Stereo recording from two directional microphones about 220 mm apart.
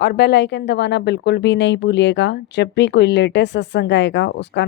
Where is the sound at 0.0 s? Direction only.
45° left (ahead or behind).